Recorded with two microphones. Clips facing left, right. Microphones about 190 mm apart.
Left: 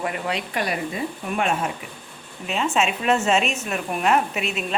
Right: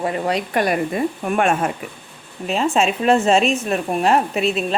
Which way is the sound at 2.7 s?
35° right (ahead or behind).